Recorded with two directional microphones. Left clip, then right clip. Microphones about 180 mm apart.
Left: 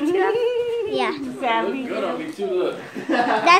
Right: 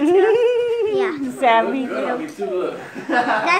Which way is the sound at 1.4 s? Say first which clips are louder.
Right 7 dB; 30° right (ahead or behind).